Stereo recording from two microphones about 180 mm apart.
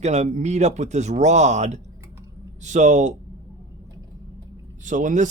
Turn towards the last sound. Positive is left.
turn(degrees=-45)  # may be behind; listen again after turning